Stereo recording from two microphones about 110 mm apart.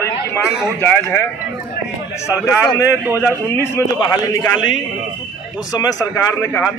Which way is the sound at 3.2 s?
20° left (ahead or behind).